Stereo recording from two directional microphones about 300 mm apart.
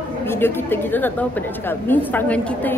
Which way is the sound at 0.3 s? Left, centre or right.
Centre.